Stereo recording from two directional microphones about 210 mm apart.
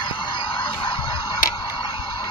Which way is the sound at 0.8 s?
25° left (ahead or behind).